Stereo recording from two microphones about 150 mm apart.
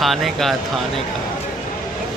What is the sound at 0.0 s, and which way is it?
Speech, centre (ahead or behind).